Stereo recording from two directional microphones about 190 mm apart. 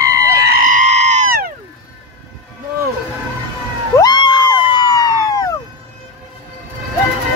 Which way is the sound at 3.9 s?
20° left (ahead or behind).